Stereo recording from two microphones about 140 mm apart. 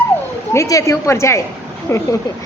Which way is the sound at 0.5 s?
20° left (ahead or behind).